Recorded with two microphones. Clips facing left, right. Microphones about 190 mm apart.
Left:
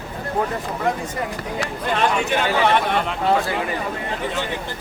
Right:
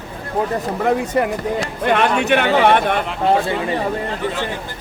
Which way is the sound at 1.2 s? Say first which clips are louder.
Right 7 dB; 70° right (ahead or behind).